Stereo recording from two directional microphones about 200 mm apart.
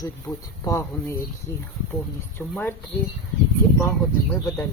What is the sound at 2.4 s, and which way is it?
Speech, 5° left (ahead or behind).